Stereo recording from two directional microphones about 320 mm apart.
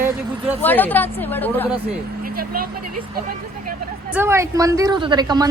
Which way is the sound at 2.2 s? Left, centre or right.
Right.